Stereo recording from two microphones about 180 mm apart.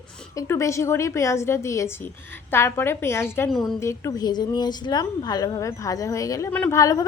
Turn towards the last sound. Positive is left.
turn(degrees=20)  # may be behind; listen again after turning